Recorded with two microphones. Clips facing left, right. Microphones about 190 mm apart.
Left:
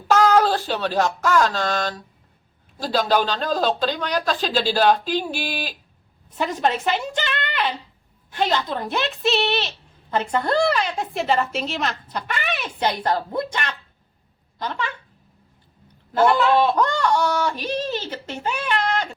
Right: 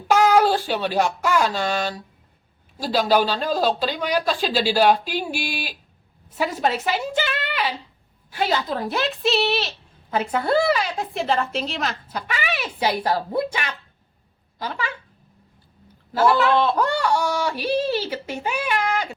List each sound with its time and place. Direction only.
0.1 s a woman's voice: 10° right (ahead or behind)
16.3 s speech: 15° left (ahead or behind)
16.7 s whimper: 10° right (ahead or behind)